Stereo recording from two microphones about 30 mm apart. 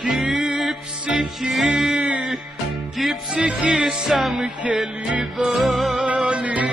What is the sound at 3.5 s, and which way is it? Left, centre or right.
Music, right.